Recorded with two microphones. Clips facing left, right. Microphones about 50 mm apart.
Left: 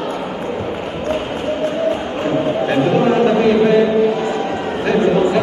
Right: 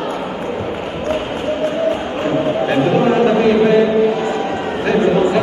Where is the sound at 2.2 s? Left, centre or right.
Centre.